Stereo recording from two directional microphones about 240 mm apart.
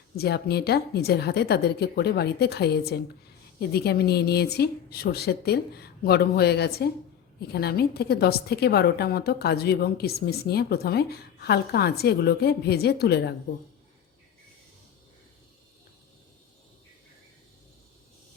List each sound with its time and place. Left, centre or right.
0.2 s a woman's voice: left